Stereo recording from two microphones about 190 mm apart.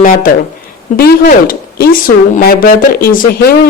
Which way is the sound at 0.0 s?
50° left (ahead or behind).